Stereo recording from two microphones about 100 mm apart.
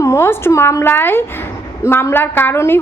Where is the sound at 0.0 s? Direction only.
30° left (ahead or behind).